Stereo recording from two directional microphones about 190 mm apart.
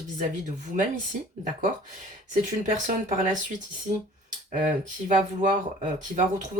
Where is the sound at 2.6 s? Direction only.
40° right (ahead or behind).